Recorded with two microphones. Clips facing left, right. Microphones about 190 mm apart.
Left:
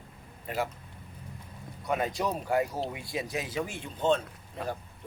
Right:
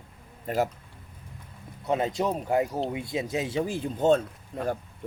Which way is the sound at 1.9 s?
25° right (ahead or behind).